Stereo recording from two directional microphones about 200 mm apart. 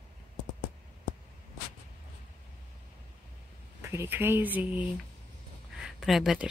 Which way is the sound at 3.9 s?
10° right (ahead or behind).